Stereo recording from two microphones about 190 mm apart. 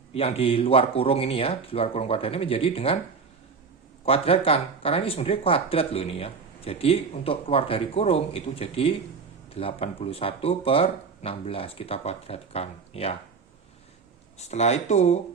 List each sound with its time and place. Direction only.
0.1 s speech: 30° left (ahead or behind)
4.0 s speech: 30° left (ahead or behind)
14.3 s speech: 35° left (ahead or behind)